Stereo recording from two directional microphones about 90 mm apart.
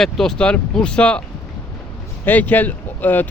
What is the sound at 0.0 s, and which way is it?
Speech, 5° left (ahead or behind).